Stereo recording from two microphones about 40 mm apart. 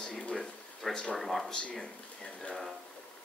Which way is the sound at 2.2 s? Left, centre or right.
Left.